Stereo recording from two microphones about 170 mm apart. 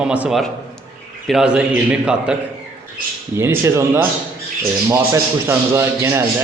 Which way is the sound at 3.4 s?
15° right (ahead or behind).